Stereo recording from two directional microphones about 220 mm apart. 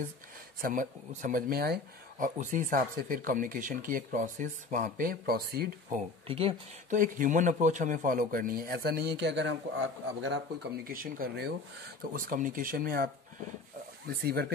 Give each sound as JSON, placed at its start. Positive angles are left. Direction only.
{"t": 0.6, "sound": "speech", "side_deg": -40}
{"t": 6.2, "sound": "speech", "side_deg": -25}
{"t": 7.0, "sound": "speech", "side_deg": -35}